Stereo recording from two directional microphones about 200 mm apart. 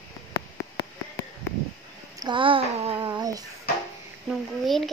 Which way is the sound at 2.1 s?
25° right (ahead or behind).